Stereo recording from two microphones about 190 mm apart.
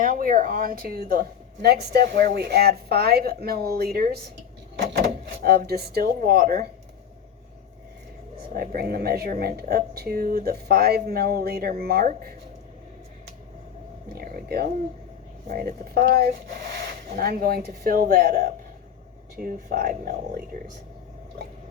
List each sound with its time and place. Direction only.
0.0 s speech: 45° right (ahead or behind)
8.5 s speech: 55° right (ahead or behind)
14.2 s speech: 50° right (ahead or behind)